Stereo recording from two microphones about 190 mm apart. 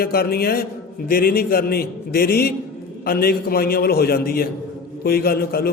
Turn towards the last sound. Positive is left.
turn(degrees=55)  # may be behind; listen again after turning